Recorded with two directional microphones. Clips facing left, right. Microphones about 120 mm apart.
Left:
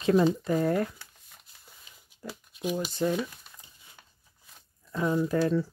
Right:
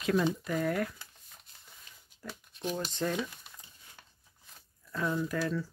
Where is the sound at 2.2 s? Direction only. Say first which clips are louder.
Left 4 dB; 10° left (ahead or behind).